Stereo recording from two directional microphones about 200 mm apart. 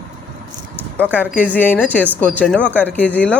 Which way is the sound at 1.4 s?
10° left (ahead or behind).